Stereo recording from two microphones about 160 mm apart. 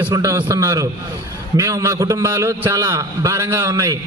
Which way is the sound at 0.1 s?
20° right (ahead or behind).